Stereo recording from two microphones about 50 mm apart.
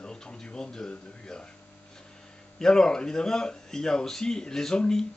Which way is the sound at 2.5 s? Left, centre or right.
Centre.